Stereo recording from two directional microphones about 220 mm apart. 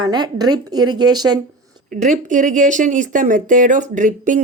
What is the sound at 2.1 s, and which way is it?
Speech, 35° right (ahead or behind).